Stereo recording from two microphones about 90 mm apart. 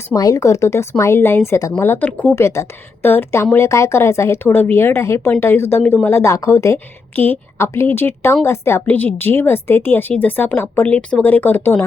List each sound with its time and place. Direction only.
0.1 s a woman's voice: 40° left (ahead or behind)
1.5 s a woman's voice: 40° left (ahead or behind)
1.7 s a woman's voice: 25° left (ahead or behind)
2.3 s a woman's voice: 30° left (ahead or behind)
5.8 s speech: 15° left (ahead or behind)
6.1 s a woman's voice: 25° left (ahead or behind)
7.2 s a woman's voice: 25° left (ahead or behind)
10.8 s a woman's voice: 15° left (ahead or behind)